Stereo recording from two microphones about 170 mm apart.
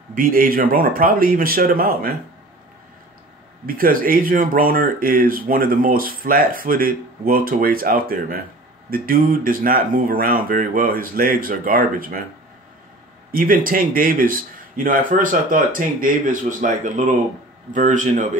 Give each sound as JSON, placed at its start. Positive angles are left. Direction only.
{"t": 0.1, "sound": "speech", "side_deg": -55}
{"t": 3.6, "sound": "speech", "side_deg": -55}
{"t": 13.3, "sound": "speech", "side_deg": -55}